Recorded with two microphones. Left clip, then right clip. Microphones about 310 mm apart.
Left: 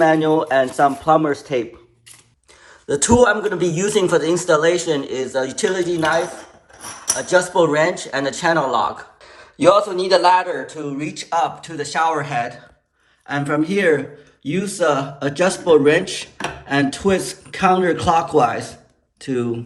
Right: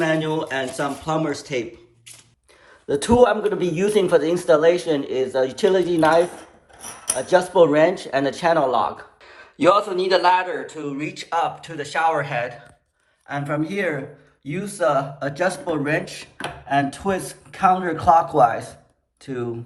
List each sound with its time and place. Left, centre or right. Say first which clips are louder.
0.1 s speech: left 7 dB; left
2.8 s a man's voice: left 2 dB; centre